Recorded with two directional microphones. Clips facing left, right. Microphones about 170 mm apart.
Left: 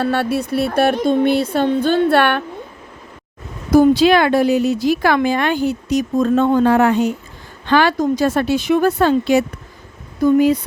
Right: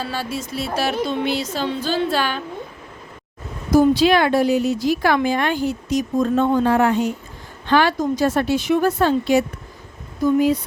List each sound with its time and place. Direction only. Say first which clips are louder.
0.0 s speech: left 8 dB; 65° left (ahead or behind)
1.0 s speech: left 7 dB; 50° left (ahead or behind)
3.7 s speech: left 3 dB; 65° left (ahead or behind)